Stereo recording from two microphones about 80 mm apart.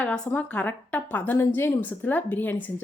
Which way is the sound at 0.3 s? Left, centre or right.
Centre.